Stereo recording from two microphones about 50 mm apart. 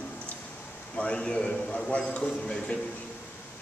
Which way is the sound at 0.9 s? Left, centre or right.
Left.